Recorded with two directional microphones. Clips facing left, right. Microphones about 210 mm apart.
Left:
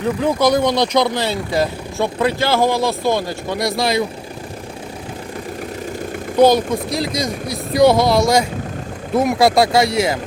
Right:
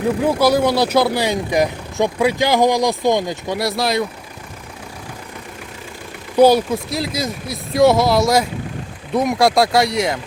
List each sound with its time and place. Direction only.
0.2 s speech: 5° right (ahead or behind)
3.6 s speech: centre (ahead or behind)
6.3 s speech: 10° right (ahead or behind)